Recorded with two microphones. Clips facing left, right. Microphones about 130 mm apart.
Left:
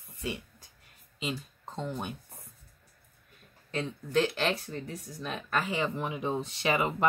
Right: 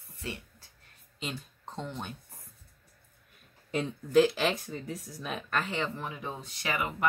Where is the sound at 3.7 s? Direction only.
10° right (ahead or behind).